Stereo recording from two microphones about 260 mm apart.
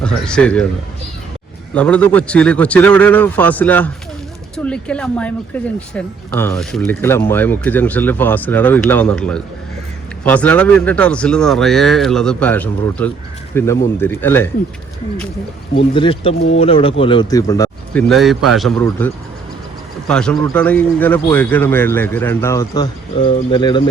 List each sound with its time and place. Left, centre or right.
0.0 s speech: centre
1.7 s speech: centre
16.0 s speech: left
18.1 s speech: centre